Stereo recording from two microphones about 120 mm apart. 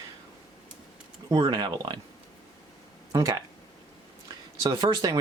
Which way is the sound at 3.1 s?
30° right (ahead or behind).